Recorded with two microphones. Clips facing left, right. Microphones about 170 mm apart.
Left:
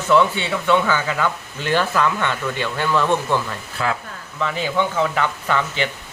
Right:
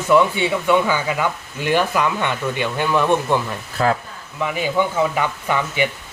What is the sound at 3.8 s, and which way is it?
Speech, 40° right (ahead or behind).